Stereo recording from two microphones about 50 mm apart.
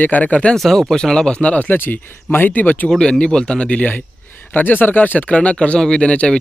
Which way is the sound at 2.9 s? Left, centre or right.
Centre.